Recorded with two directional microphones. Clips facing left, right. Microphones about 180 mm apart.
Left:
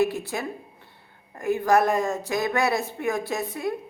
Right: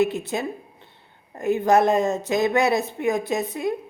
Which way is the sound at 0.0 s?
20° right (ahead or behind).